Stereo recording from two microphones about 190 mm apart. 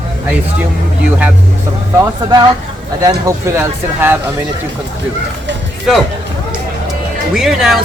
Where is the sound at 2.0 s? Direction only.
20° right (ahead or behind).